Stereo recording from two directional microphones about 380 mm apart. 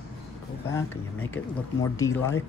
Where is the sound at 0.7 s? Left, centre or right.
Centre.